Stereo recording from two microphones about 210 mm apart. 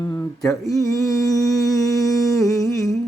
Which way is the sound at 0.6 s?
15° left (ahead or behind).